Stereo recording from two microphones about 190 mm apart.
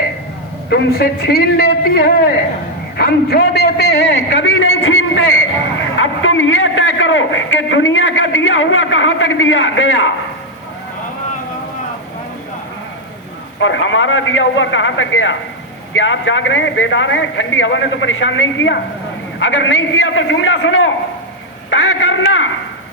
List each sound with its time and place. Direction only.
0.7 s a man's voice: 60° left (ahead or behind); by 10.1 s 90° left
13.6 s a man's voice: 85° left